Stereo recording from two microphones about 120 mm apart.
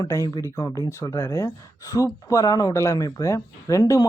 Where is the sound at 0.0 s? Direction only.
30° left (ahead or behind).